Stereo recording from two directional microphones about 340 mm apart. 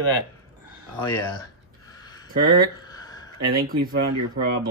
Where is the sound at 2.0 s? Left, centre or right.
Centre.